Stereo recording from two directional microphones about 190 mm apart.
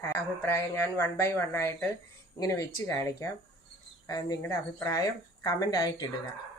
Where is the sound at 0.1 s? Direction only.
15° left (ahead or behind).